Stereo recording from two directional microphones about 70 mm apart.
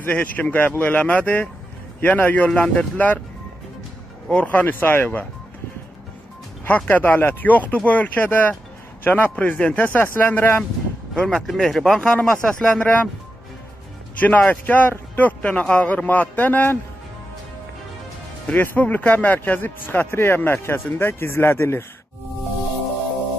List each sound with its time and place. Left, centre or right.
0.0 s a man's voice: left
4.3 s a man's voice: left
6.9 s a man's voice: left
11.2 s speech: centre
14.2 s a man's voice: left
18.5 s speech: left